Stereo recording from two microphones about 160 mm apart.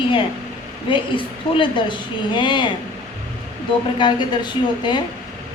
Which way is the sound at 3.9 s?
30° left (ahead or behind).